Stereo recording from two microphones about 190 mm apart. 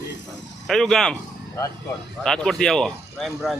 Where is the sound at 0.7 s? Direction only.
Centre (ahead or behind).